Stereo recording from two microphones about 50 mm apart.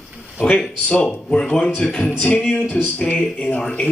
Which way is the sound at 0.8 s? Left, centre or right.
Left.